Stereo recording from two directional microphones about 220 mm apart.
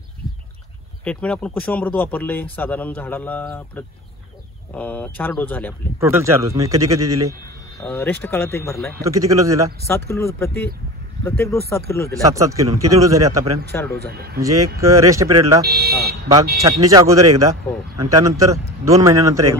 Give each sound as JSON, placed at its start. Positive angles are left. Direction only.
{"t": 1.0, "sound": "speech", "side_deg": 5}
{"t": 5.9, "sound": "speech", "side_deg": -10}
{"t": 7.8, "sound": "speech", "side_deg": 10}
{"t": 9.0, "sound": "speech", "side_deg": -15}
{"t": 9.8, "sound": "speech", "side_deg": 10}
{"t": 12.2, "sound": "speech", "side_deg": -15}
{"t": 13.7, "sound": "speech", "side_deg": 10}
{"t": 13.9, "sound": "speech", "side_deg": -45}
{"t": 14.8, "sound": "speech", "side_deg": -15}
{"t": 15.6, "sound": "speech", "side_deg": -45}
{"t": 16.6, "sound": "speech", "side_deg": -15}